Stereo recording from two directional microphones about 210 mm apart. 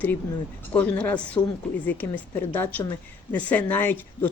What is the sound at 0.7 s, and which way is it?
Speech, 5° left (ahead or behind).